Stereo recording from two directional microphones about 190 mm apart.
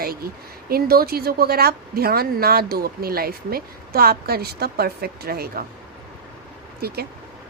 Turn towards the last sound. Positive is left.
turn(degrees=-55)  # may be behind; listen again after turning